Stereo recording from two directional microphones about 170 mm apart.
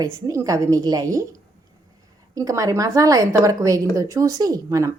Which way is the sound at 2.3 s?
20° right (ahead or behind).